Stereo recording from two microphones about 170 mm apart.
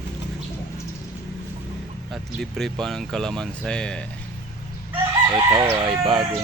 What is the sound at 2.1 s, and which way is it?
Speech, centre (ahead or behind).